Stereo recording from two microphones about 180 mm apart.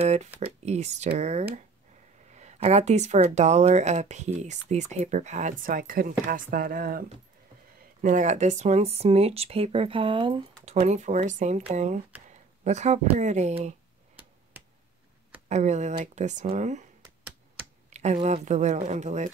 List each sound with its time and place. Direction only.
0.0 s speech: 40° right (ahead or behind)
15.4 s speech: 40° right (ahead or behind)
17.8 s speech: 40° right (ahead or behind)